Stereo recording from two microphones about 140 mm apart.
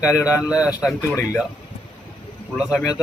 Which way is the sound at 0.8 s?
25° left (ahead or behind).